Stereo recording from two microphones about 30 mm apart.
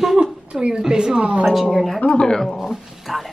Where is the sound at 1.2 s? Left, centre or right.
Right.